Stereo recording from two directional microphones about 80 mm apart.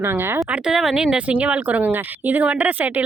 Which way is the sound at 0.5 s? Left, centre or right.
Centre.